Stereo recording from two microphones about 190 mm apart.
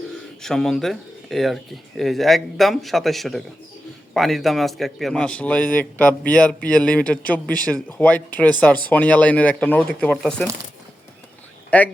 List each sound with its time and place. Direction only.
0.4 s a man's voice: centre (ahead or behind)
11.7 s a man's voice: 10° left (ahead or behind)